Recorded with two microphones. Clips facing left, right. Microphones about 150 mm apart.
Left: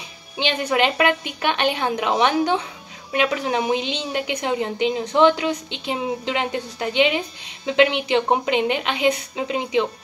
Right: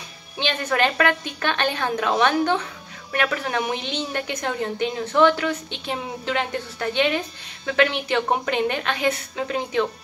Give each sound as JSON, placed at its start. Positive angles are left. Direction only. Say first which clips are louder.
{"t": 0.4, "sound": "a woman's voice", "louder": "left 2 dB", "side_deg": 15}